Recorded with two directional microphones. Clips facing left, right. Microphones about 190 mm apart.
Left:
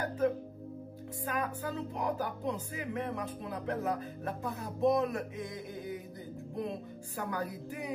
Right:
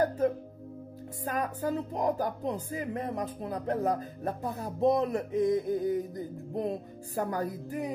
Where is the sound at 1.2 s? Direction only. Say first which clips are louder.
Right 4 dB; 40° right (ahead or behind).